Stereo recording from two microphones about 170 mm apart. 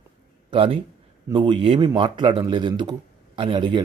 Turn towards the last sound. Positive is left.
turn(degrees=-25)  # may be behind; listen again after turning